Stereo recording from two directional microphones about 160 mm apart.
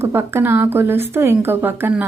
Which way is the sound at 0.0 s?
15° right (ahead or behind).